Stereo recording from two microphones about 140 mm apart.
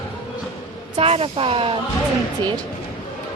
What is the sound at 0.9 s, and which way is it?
Speech, 40° right (ahead or behind).